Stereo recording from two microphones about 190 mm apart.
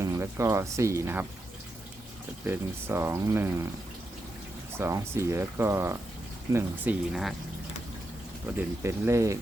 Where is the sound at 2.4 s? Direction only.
10° right (ahead or behind).